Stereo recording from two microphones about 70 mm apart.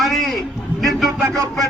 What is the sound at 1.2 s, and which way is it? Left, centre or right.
Speech, right.